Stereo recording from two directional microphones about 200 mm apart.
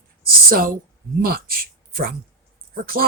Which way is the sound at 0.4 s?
45° right (ahead or behind).